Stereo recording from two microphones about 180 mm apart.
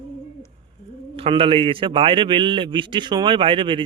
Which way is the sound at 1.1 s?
30° right (ahead or behind).